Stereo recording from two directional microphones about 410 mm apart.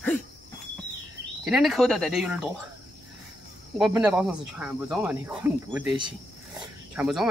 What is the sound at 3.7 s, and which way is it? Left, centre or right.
Speech, centre.